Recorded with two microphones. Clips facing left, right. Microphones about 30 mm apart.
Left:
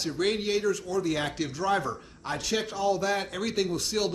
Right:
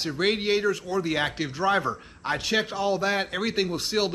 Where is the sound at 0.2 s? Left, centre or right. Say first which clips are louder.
Right 3 dB; right.